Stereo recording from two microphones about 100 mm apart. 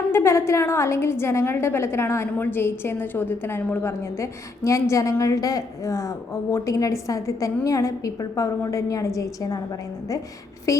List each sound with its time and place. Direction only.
0.1 s a woman's voice: 25° left (ahead or behind)
10.7 s speech: 30° left (ahead or behind)